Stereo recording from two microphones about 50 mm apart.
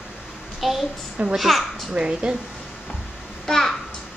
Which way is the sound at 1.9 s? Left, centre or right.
Centre.